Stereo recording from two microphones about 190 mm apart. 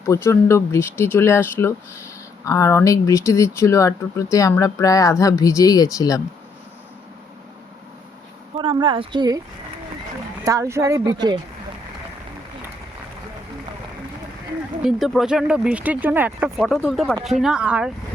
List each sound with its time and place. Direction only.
0.0 s speech: 15° left (ahead or behind)
8.5 s speech: 25° right (ahead or behind)
10.4 s speech: 15° right (ahead or behind)
14.8 s speech: centre (ahead or behind)
16.6 s speech: 5° left (ahead or behind)